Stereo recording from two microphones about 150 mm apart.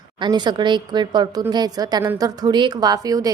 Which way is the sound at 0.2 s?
30° right (ahead or behind).